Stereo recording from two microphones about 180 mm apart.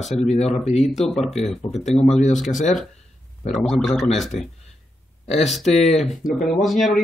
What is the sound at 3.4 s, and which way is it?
A man's voice, centre (ahead or behind).